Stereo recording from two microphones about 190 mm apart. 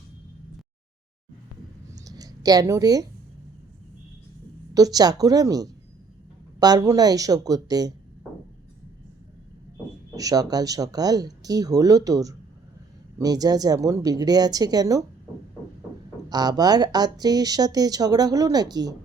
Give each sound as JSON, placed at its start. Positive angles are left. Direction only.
{"t": 1.9, "sound": "clicking", "side_deg": -20}
{"t": 4.7, "sound": "speech", "side_deg": -20}
{"t": 10.2, "sound": "speech", "side_deg": -20}
{"t": 16.3, "sound": "speech", "side_deg": -20}